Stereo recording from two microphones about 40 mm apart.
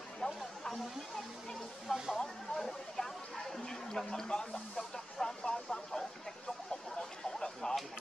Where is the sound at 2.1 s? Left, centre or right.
Centre.